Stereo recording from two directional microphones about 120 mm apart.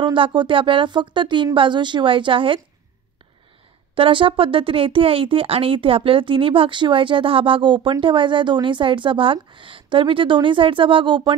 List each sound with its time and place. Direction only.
0.0 s speech: 45° right (ahead or behind)
3.9 s speech: 45° right (ahead or behind)